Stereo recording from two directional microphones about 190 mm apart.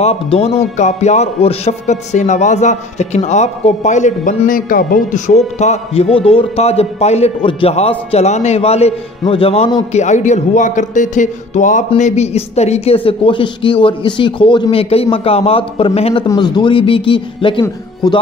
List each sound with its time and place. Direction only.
0.0 s speech: 35° left (ahead or behind)